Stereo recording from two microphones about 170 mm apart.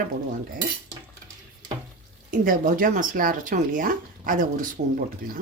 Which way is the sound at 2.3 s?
50° right (ahead or behind).